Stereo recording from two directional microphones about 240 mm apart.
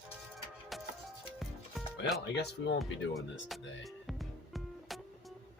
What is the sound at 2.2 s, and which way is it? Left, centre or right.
Speech, left.